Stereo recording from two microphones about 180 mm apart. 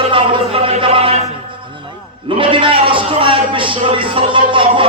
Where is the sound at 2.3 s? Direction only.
30° right (ahead or behind).